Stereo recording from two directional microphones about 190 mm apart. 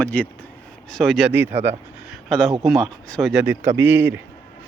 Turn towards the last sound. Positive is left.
turn(degrees=-10)  # may be behind; listen again after turning